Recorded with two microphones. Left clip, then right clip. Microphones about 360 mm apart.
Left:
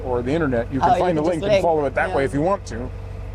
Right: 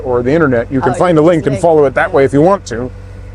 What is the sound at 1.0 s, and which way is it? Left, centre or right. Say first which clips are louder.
Speech: right 9 dB; right.